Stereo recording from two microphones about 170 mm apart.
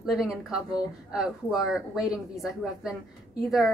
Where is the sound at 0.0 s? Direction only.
Centre (ahead or behind).